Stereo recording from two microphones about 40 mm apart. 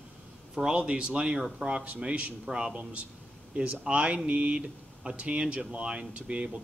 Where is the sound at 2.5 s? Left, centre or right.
Right.